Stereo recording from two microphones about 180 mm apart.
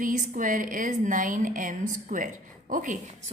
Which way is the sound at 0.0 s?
45° right (ahead or behind).